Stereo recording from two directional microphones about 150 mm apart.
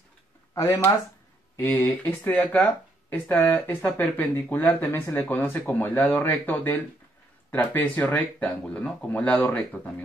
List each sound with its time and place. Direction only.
0.6 s speech: 15° left (ahead or behind)